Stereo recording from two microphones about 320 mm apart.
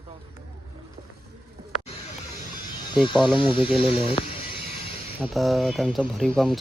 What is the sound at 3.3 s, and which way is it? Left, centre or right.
Speech, centre.